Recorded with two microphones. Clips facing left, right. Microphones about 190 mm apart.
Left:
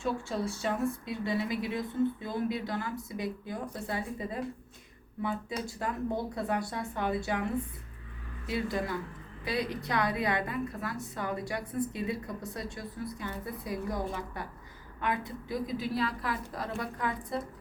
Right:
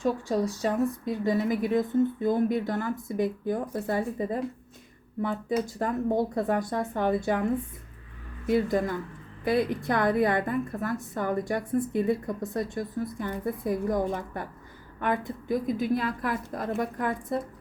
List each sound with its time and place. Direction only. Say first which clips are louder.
0.0 s a woman's voice: right 6 dB; 40° right (ahead or behind)
8.4 s speech: right 8 dB; 50° right (ahead or behind)